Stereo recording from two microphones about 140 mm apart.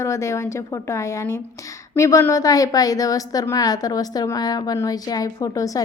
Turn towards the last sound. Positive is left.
turn(degrees=25)  # may be behind; listen again after turning